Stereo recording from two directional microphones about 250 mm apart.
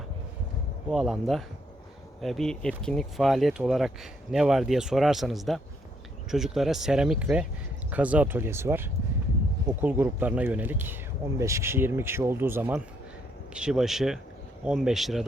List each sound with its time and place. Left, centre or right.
0.9 s speech: centre